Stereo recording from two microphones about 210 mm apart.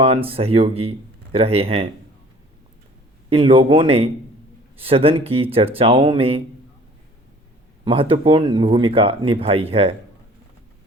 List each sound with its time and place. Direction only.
0.0 s speech: 25° right (ahead or behind)
3.2 s speech: 25° right (ahead or behind)
7.9 s speech: 25° right (ahead or behind)